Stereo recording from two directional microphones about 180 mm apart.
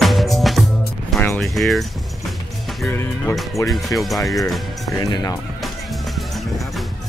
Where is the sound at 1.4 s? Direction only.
Centre (ahead or behind).